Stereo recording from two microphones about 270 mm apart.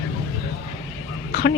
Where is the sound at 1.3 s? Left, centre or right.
Left.